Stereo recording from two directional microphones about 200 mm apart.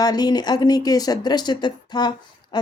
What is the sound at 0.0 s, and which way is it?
Speech, 20° left (ahead or behind).